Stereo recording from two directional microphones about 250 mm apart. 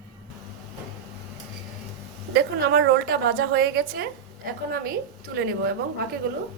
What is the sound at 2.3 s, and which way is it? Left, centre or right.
A woman's voice, right.